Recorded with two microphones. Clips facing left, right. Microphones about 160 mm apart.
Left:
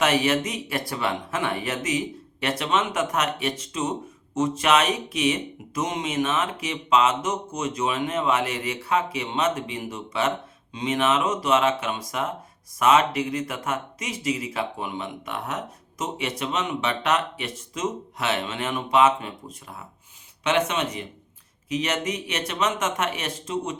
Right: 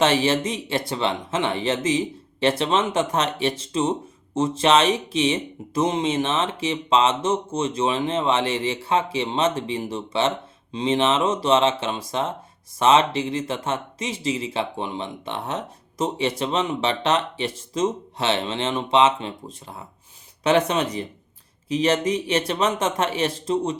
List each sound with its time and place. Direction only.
0.0 s speech: 30° right (ahead or behind)